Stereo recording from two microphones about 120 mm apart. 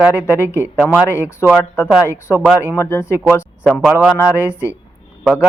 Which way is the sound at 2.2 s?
20° left (ahead or behind).